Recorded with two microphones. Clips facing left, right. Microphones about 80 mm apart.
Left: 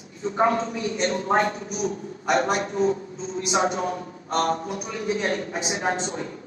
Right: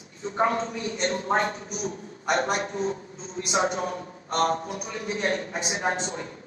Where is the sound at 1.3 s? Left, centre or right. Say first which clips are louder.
Left 3 dB; right.